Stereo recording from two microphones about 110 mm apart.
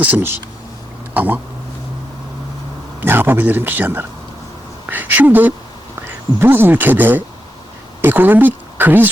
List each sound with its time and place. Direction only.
0.0 s a man's voice: 15° right (ahead or behind)
3.0 s a man's voice: 20° right (ahead or behind)